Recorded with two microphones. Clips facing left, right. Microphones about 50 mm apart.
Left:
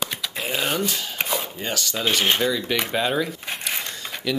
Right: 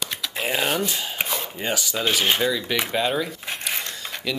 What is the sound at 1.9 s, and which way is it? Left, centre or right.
Speech, centre.